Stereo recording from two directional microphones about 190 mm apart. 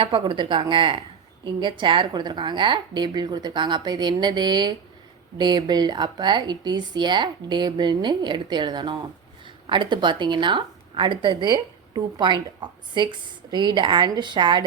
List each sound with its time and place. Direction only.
0.0 s a woman's voice: 25° right (ahead or behind)